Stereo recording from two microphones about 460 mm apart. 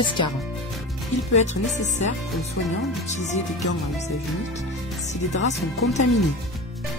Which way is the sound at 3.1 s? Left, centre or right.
Centre.